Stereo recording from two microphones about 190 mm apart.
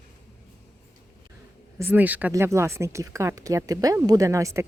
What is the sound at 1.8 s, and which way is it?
A woman's voice, 10° right (ahead or behind).